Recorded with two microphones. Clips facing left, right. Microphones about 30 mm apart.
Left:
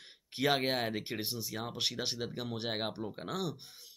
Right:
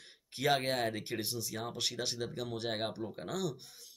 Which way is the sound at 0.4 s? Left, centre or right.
Centre.